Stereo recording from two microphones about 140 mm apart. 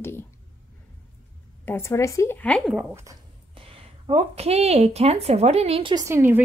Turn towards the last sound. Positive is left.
turn(degrees=-15)  # may be behind; listen again after turning